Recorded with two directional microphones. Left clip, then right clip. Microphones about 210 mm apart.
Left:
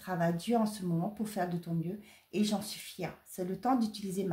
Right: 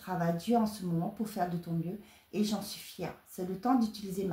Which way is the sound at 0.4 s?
35° left (ahead or behind).